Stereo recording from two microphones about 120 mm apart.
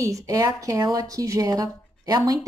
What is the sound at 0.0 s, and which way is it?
A woman's voice, 30° right (ahead or behind).